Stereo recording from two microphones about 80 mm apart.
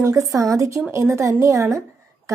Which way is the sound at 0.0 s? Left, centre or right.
Right.